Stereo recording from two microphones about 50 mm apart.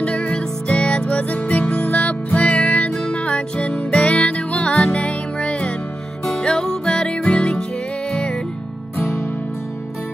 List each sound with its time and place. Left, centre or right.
0.0 s music: left
6.2 s music: centre
9.0 s music: left